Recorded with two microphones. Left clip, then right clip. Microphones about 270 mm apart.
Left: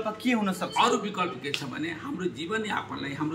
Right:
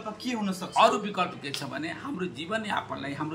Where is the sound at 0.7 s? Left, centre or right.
Centre.